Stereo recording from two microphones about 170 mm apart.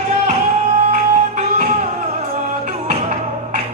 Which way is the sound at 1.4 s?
50° right (ahead or behind).